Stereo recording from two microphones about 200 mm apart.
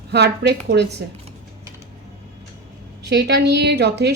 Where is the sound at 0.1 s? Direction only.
55° right (ahead or behind).